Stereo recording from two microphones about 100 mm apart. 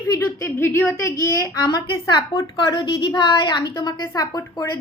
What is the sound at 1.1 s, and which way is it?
A woman's voice, 35° left (ahead or behind).